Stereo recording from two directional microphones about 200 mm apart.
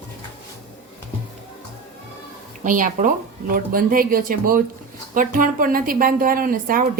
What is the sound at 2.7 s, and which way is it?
A woman's voice, 40° right (ahead or behind).